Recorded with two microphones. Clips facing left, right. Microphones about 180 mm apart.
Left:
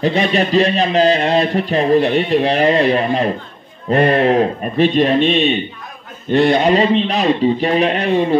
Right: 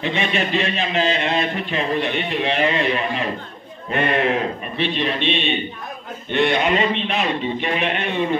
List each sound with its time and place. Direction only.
0.0 s a man's voice: 40° left (ahead or behind)